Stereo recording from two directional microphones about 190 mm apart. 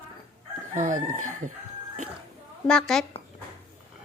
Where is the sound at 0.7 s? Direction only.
45° right (ahead or behind).